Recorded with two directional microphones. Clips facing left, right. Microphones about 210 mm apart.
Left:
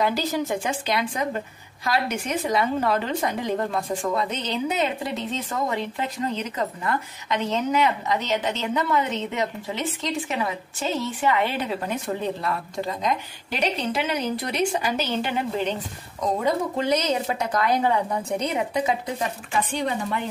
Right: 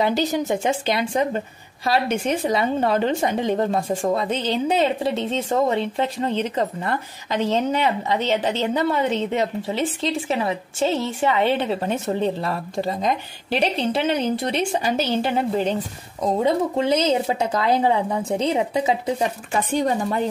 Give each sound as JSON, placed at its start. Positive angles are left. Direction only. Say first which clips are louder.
{"t": 0.3, "sound": "a woman's voice", "louder": "right 4 dB", "side_deg": -25}
{"t": 19.7, "sound": "speech", "louder": "right 5 dB", "side_deg": -45}